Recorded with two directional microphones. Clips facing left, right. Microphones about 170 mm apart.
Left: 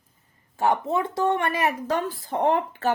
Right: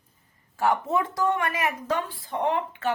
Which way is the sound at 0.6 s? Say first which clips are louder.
Left 1 dB; 25° left (ahead or behind).